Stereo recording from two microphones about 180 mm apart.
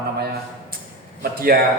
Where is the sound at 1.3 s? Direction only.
55° right (ahead or behind).